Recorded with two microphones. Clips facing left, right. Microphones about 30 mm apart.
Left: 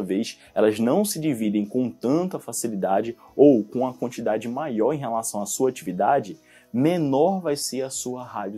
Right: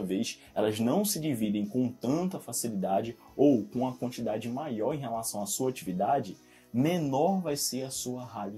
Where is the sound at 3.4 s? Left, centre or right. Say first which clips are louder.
Left 9 dB; left.